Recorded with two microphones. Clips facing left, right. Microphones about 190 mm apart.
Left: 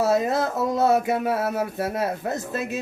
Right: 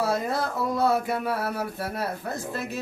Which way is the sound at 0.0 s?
20° left (ahead or behind).